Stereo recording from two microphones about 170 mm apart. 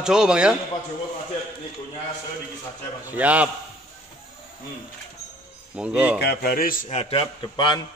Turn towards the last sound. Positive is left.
turn(degrees=25)  # may be behind; listen again after turning